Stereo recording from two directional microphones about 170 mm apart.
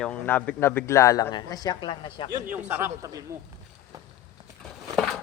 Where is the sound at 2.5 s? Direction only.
15° right (ahead or behind).